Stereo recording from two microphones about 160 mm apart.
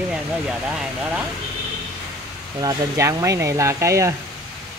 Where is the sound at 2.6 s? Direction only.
20° right (ahead or behind).